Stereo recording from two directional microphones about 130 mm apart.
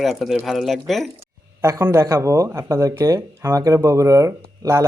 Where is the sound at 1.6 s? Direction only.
20° right (ahead or behind).